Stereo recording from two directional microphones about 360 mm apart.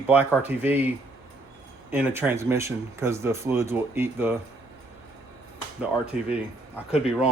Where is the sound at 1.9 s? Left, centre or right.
Centre.